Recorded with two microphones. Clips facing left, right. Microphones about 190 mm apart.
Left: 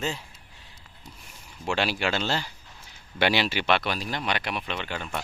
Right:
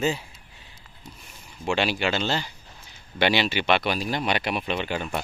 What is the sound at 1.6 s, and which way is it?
Speech, centre (ahead or behind).